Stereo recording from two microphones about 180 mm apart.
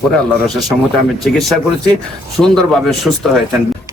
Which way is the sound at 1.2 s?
Centre (ahead or behind).